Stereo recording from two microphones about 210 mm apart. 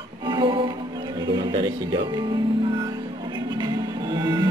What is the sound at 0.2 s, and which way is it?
Music, 20° right (ahead or behind).